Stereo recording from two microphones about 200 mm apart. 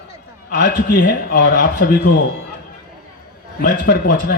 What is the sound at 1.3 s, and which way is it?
Speech, 50° left (ahead or behind).